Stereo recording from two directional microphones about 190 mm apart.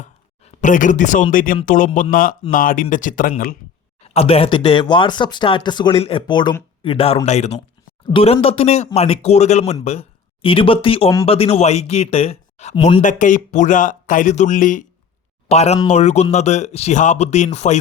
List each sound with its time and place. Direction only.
0.0 s speech: 40° left (ahead or behind)
4.0 s speech: 30° left (ahead or behind)